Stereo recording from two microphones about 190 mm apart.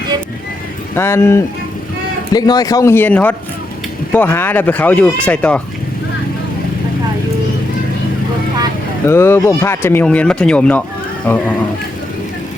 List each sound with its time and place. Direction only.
0.9 s speech: 15° left (ahead or behind)
9.0 s speech: 15° left (ahead or behind)